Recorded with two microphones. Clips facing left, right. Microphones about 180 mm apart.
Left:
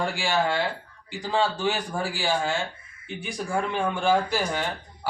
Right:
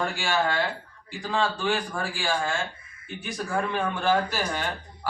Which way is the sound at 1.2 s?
20° left (ahead or behind).